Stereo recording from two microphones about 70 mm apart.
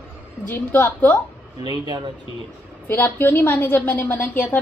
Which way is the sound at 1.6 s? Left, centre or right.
Right.